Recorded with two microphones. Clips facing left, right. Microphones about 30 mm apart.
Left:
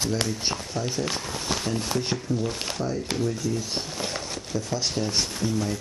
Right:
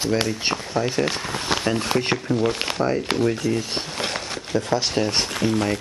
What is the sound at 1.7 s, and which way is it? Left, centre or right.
Speech, right.